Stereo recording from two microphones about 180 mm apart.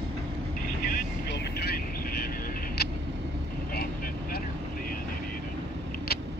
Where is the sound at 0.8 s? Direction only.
65° left (ahead or behind).